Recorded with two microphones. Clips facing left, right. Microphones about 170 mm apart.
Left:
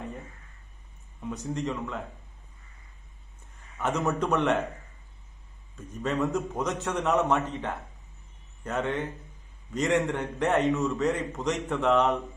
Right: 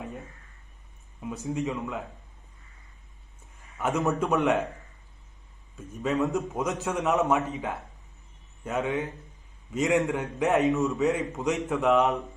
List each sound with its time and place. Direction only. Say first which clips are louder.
1.2 s a man's voice: right 1 dB; 5° right (ahead or behind)
3.4 s a sound: right 1 dB; centre (ahead or behind)
4.0 s a man's voice: right 1 dB; centre (ahead or behind)
5.7 s a man's voice: right 2 dB; centre (ahead or behind)